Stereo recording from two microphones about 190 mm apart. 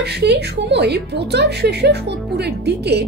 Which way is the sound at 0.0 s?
60° right (ahead or behind).